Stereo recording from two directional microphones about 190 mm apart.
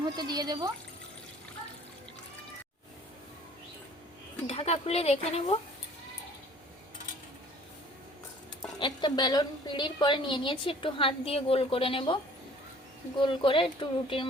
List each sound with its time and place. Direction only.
0.0 s speech: 20° right (ahead or behind)
4.4 s speech: 35° left (ahead or behind)
8.8 s a woman's voice: 25° left (ahead or behind)